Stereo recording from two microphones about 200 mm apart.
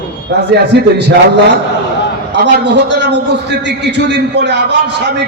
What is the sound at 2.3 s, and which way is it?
A man's voice, 60° right (ahead or behind).